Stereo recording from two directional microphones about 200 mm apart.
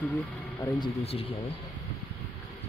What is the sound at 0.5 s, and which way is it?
Speech, 20° left (ahead or behind).